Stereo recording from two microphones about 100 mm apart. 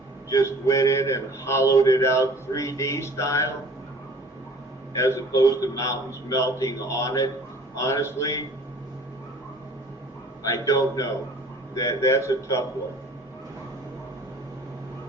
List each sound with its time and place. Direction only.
0.3 s a sound: 30° left (ahead or behind)
4.9 s a man's voice: 30° left (ahead or behind)
10.4 s a man's voice: 35° left (ahead or behind)